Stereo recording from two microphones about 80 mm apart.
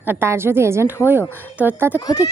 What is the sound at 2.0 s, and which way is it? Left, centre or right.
Speech, left.